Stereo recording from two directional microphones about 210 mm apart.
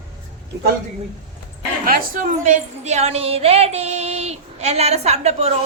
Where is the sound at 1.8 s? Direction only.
40° right (ahead or behind).